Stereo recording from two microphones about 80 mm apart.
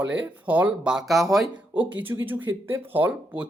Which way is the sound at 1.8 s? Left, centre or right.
Right.